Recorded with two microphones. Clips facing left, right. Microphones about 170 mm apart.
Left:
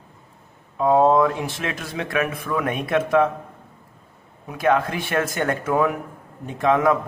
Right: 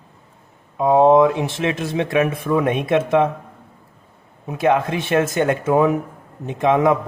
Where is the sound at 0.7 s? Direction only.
20° right (ahead or behind).